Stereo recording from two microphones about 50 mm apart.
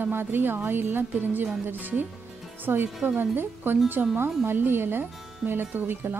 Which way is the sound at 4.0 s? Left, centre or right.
Right.